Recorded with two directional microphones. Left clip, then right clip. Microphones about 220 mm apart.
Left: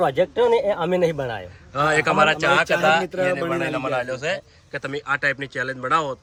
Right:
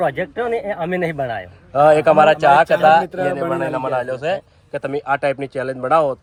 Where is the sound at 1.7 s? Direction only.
5° right (ahead or behind).